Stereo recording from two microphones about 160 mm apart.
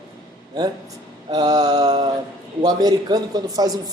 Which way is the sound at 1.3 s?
25° right (ahead or behind).